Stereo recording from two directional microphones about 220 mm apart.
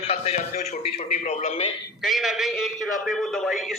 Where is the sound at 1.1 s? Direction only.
30° left (ahead or behind).